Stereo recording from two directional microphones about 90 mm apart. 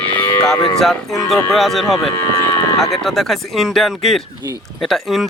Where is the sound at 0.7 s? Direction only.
Centre (ahead or behind).